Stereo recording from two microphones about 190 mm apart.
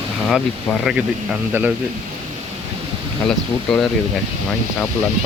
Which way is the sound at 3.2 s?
5° left (ahead or behind).